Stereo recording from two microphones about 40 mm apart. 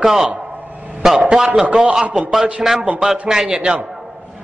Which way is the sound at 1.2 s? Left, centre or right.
Right.